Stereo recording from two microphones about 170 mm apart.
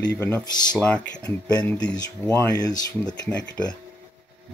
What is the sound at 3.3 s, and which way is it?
Speech, 5° left (ahead or behind).